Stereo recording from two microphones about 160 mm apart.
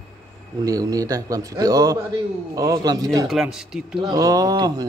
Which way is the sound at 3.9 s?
25° right (ahead or behind).